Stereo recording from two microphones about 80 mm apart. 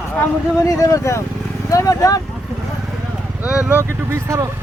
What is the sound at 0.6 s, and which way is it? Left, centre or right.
Speech, left.